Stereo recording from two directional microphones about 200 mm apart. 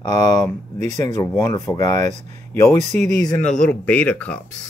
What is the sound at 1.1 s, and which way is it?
Speech, 15° left (ahead or behind).